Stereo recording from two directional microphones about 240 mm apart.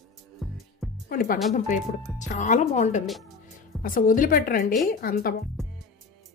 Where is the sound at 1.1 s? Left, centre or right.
Left.